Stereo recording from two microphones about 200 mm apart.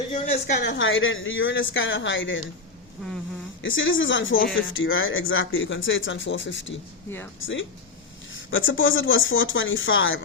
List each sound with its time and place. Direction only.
0.1 s a sound: 35° left (ahead or behind)
0.5 s speech: 60° left (ahead or behind)
3.6 s speech: 70° left (ahead or behind)